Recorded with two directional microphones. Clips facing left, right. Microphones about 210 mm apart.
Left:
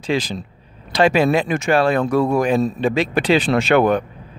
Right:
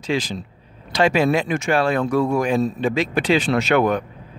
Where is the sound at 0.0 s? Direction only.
35° left (ahead or behind).